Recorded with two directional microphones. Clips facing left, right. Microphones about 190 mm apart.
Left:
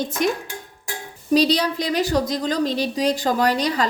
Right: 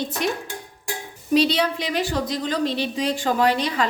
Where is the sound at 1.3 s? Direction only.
40° left (ahead or behind).